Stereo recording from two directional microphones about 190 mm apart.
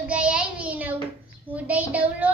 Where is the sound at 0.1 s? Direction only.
5° right (ahead or behind).